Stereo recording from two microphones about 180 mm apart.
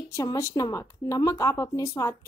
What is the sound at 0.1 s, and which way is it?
A woman's voice, 15° left (ahead or behind).